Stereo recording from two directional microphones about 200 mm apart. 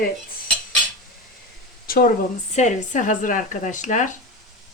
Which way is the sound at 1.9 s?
45° left (ahead or behind).